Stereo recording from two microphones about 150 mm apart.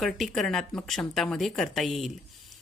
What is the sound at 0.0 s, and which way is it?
Speech, centre (ahead or behind).